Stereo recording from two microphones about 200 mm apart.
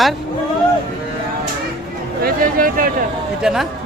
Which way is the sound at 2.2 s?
45° right (ahead or behind).